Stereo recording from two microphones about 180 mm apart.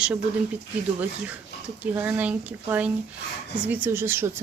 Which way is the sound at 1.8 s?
10° right (ahead or behind).